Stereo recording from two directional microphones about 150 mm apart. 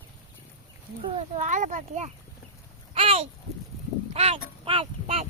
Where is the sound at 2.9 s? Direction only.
40° right (ahead or behind).